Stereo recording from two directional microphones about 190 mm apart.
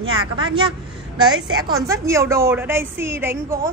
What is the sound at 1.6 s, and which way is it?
A woman's voice, 15° right (ahead or behind).